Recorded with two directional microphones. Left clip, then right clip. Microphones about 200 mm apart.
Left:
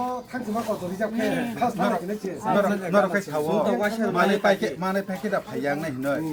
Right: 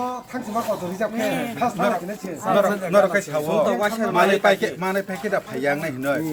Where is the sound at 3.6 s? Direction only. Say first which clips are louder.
Right 3 dB; 10° right (ahead or behind).